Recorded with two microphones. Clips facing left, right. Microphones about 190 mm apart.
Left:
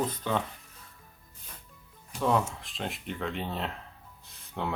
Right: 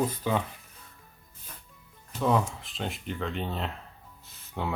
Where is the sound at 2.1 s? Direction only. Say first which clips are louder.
Right 1 dB; 5° right (ahead or behind).